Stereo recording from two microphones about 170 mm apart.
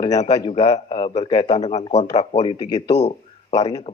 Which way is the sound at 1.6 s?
40° left (ahead or behind).